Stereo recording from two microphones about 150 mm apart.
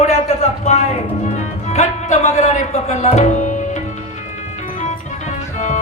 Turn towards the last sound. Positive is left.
turn(degrees=50)  # may be behind; listen again after turning